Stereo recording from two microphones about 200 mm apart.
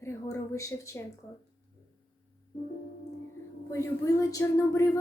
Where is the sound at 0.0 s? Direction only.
15° left (ahead or behind).